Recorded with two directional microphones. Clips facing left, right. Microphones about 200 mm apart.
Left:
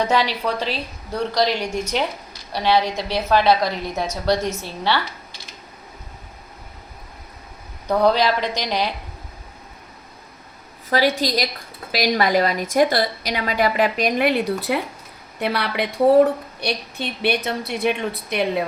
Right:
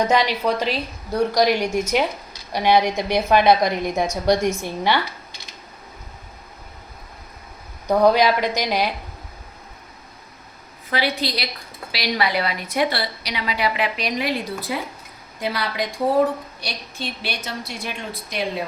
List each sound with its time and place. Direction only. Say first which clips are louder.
0.3 s a woman's voice: right 2 dB; 10° right (ahead or behind)
7.9 s a woman's voice: right 2 dB; 10° right (ahead or behind)
11.2 s a woman's voice: left 4 dB; 45° left (ahead or behind); by 18.4 s 60° left (ahead or behind)